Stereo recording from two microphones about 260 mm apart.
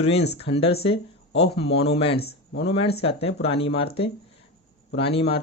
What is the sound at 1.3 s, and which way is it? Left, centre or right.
Speech, left.